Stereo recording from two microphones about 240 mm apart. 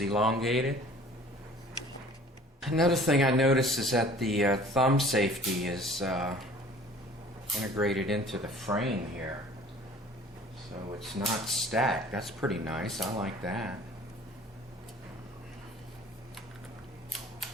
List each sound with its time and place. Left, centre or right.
0.0 s speech: centre
2.6 s speech: centre
11.2 s speech: centre